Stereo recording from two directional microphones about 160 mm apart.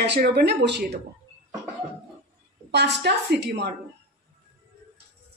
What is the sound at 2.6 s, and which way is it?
A woman's voice, 90° right.